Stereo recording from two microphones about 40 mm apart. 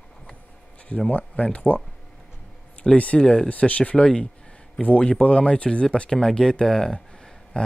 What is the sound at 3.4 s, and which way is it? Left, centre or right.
Speech, left.